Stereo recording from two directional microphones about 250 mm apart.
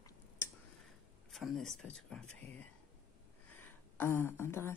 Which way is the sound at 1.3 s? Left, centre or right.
Centre.